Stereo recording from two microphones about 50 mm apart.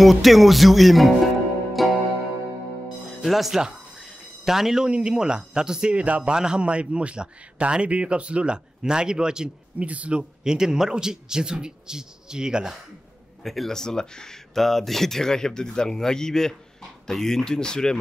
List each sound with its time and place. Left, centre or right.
0.0 s speech: centre
1.7 s music: centre
3.2 s music: centre
4.9 s speech: centre
5.9 s a man's voice: right
6.3 s a man's voice: centre
9.8 s a man's voice: right
10.4 s speech: centre
13.4 s speech: centre